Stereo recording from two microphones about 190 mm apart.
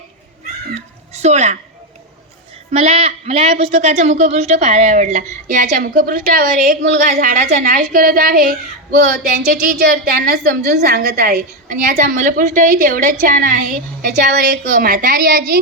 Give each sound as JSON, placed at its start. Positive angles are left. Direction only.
{"t": 1.1, "sound": "a woman's voice", "side_deg": -35}
{"t": 2.7, "sound": "speech", "side_deg": -35}
{"t": 9.6, "sound": "a woman's voice", "side_deg": -50}